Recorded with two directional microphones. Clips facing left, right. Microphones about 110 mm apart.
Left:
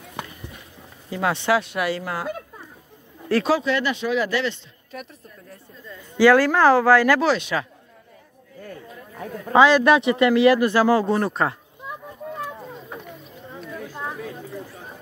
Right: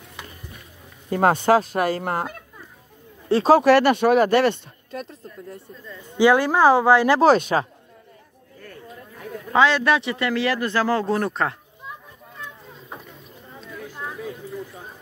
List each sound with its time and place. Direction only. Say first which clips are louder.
1.1 s speech: right 4 dB; 45° right (ahead or behind)
3.3 s speech: right 1 dB; 25° right (ahead or behind)
3.6 s speech: right 8 dB; 60° right (ahead or behind)
6.1 s speech: left 1 dB; 20° right (ahead or behind)
7.2 s speech: right 5 dB; 45° right (ahead or behind)
9.5 s speech: left 3 dB; 15° left (ahead or behind)
11.1 s speech: left 1 dB; centre (ahead or behind)